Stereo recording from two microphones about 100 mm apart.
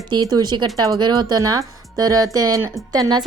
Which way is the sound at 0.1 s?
40° right (ahead or behind).